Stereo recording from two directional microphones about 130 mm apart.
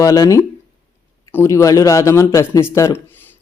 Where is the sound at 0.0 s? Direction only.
25° left (ahead or behind).